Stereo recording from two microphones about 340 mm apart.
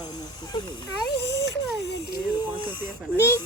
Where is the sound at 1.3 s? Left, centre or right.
Left.